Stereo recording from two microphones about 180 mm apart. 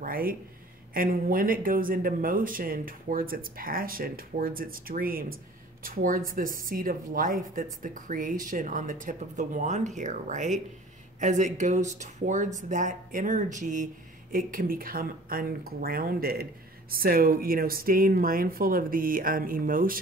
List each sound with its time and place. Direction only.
0.0 s speech: 50° right (ahead or behind)